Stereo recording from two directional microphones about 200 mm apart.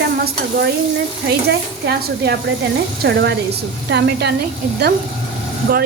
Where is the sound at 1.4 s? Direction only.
55° right (ahead or behind).